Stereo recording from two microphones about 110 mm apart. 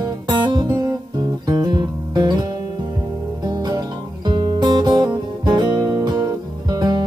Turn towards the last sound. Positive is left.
turn(degrees=-40)  # may be behind; listen again after turning